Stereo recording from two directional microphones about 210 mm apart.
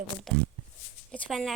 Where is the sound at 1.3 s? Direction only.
Centre (ahead or behind).